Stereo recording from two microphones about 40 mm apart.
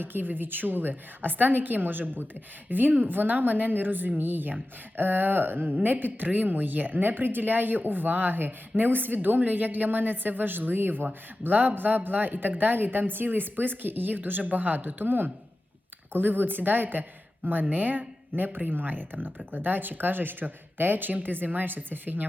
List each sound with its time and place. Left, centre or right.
0.0 s a woman's voice: right